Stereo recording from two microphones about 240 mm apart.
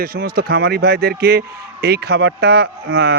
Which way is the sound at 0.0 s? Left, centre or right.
Right.